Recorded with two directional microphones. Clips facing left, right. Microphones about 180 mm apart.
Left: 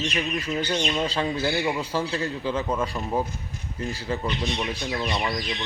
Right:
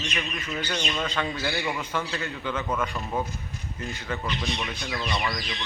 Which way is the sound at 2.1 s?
35° left (ahead or behind).